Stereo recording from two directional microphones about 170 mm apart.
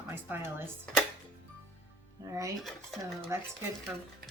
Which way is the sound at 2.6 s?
Centre (ahead or behind).